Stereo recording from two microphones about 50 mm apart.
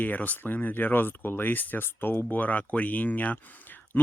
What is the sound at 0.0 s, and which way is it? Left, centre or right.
Speech, left.